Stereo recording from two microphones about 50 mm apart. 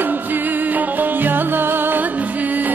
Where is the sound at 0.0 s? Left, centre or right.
Right.